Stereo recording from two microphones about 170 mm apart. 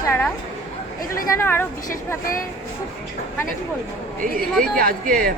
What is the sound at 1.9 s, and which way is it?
Speech, 55° left (ahead or behind).